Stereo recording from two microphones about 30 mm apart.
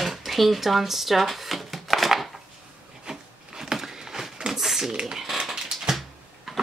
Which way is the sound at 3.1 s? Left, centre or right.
Centre.